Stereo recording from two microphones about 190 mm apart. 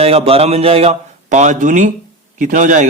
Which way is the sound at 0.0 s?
30° right (ahead or behind).